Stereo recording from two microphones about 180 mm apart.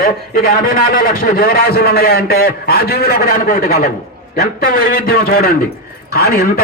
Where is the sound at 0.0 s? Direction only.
55° left (ahead or behind).